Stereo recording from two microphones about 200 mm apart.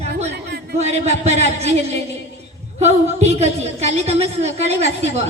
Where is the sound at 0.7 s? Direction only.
35° right (ahead or behind).